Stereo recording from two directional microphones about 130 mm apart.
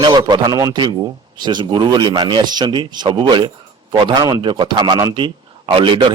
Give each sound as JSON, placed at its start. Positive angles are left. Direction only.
{"t": 0.0, "sound": "a man's voice", "side_deg": -35}
{"t": 5.1, "sound": "speech", "side_deg": -40}